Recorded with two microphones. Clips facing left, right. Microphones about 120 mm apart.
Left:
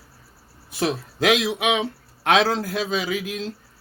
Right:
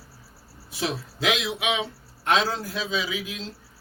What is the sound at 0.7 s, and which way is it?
A man's voice, 55° left (ahead or behind).